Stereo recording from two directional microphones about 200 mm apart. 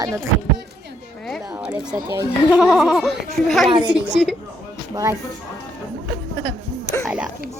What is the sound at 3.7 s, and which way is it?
Speech, 25° right (ahead or behind).